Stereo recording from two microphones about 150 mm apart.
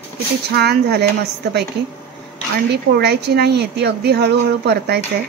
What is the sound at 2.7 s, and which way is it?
Speech, 90° right.